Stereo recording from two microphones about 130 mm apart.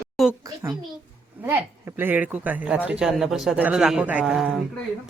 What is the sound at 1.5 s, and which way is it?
Speech, 15° right (ahead or behind).